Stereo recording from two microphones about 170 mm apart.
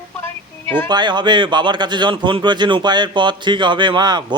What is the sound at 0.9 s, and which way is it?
Speech, 25° right (ahead or behind).